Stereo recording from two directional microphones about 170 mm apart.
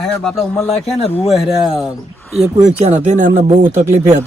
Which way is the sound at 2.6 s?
45° right (ahead or behind).